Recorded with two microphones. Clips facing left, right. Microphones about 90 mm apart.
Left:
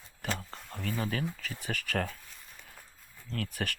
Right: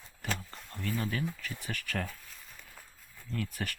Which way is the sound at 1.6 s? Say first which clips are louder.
Left 4 dB; 80° left.